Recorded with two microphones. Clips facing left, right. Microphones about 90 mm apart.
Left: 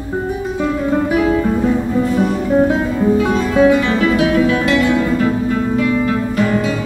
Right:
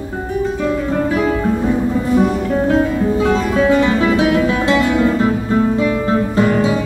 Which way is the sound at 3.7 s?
25° right (ahead or behind).